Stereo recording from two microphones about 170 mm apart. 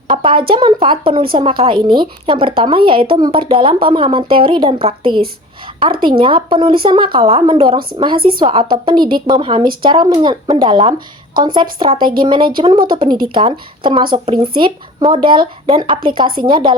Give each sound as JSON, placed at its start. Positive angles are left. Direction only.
{"t": 0.1, "sound": "a woman's voice", "side_deg": -30}